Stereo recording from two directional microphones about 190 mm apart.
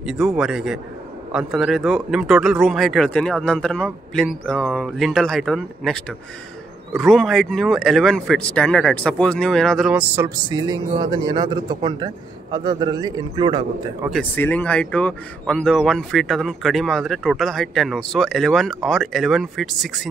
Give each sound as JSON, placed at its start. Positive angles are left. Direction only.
{"t": 0.0, "sound": "speech", "side_deg": 0}
{"t": 10.1, "sound": "a man's voice", "side_deg": -15}
{"t": 14.1, "sound": "speech", "side_deg": 10}